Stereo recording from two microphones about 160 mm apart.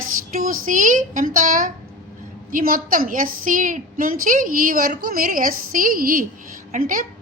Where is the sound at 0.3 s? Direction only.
55° right (ahead or behind).